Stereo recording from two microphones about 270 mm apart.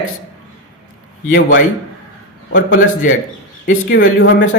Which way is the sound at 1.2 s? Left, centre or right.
Left.